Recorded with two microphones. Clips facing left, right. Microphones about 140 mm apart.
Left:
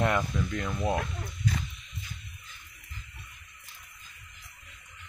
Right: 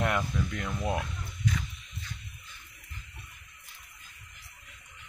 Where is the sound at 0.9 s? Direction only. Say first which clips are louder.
Left 2 dB; 40° left (ahead or behind).